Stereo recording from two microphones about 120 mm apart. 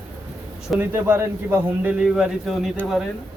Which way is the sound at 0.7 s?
20° right (ahead or behind).